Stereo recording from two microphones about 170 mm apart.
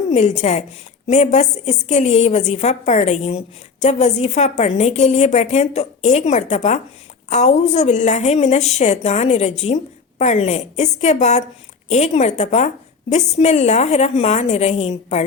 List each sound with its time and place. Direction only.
0.1 s a woman's voice: 40° left (ahead or behind)